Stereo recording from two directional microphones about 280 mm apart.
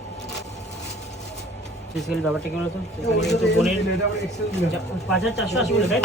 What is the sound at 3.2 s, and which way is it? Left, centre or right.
Speech, centre.